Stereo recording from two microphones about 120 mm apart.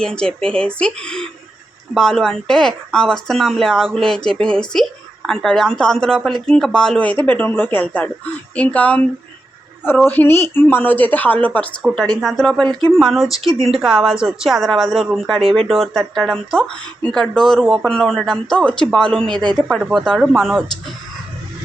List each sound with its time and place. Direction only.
0.0 s speech: 5° left (ahead or behind)
10.1 s speech: 15° left (ahead or behind)
19.3 s speech: 40° right (ahead or behind)
19.5 s speech: centre (ahead or behind)